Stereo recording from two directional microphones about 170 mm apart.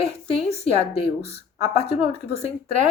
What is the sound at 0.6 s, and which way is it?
Speech, 35° left (ahead or behind).